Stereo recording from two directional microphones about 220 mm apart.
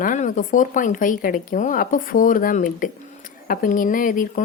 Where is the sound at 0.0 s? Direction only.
35° left (ahead or behind).